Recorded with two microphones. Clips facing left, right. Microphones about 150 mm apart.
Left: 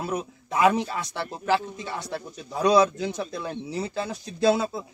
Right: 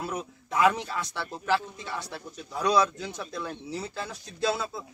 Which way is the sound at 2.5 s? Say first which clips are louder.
Left 5 dB; 20° left (ahead or behind).